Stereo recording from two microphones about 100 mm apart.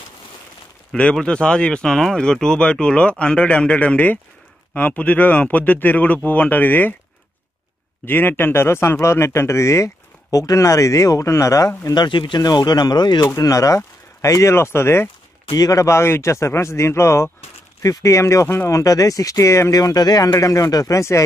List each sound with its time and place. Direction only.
0.9 s speech: 10° left (ahead or behind)
8.0 s speech: 20° left (ahead or behind)
12.0 s speech: 55° left (ahead or behind); by 15.0 s 25° left (ahead or behind)
15.5 s speech: 35° left (ahead or behind)